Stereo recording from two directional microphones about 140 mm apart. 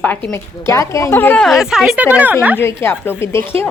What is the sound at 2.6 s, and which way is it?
Speech, 15° left (ahead or behind).